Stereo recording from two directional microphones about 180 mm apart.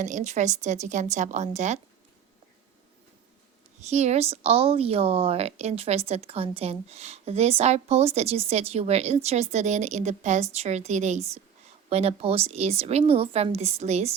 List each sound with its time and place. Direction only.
0.0 s speech: 40° right (ahead or behind)
3.8 s speech: 40° right (ahead or behind)